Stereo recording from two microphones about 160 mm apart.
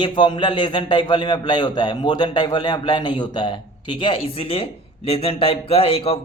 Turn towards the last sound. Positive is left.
turn(degrees=35)  # may be behind; listen again after turning